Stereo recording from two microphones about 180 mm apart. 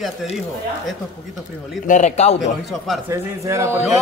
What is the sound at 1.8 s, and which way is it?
Speech, 45° left (ahead or behind).